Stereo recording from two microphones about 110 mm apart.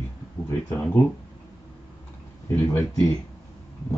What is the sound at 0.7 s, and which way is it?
Speech, 15° left (ahead or behind).